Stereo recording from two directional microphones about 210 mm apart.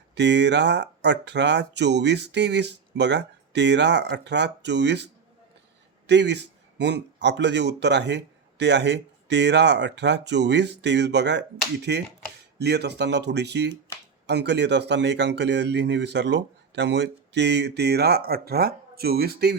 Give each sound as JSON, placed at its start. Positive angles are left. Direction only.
{"t": 0.1, "sound": "speech", "side_deg": -55}
{"t": 6.1, "sound": "speech", "side_deg": -55}